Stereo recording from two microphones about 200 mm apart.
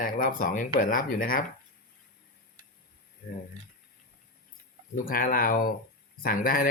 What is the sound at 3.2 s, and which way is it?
Speech, 50° left (ahead or behind).